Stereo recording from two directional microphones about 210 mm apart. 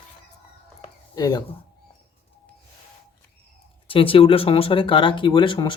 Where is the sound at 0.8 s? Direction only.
20° left (ahead or behind).